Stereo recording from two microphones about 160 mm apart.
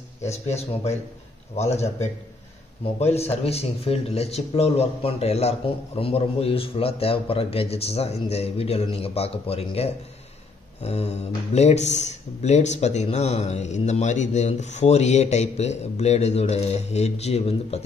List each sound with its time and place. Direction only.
0.2 s speech: 45° left (ahead or behind)